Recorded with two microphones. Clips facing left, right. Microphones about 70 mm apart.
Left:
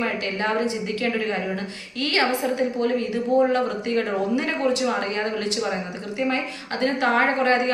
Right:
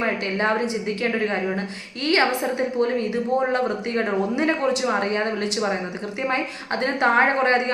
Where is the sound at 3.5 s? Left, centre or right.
Right.